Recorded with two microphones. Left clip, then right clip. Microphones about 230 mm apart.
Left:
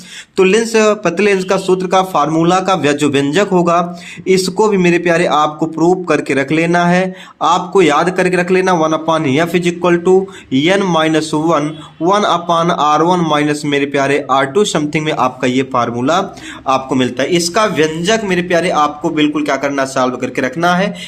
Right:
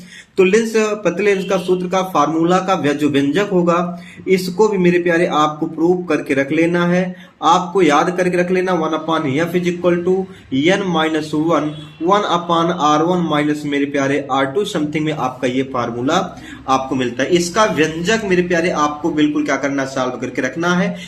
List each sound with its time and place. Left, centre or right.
0.3 s speech: left